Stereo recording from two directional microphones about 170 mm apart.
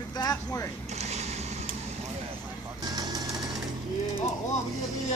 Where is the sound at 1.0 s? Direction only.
40° right (ahead or behind).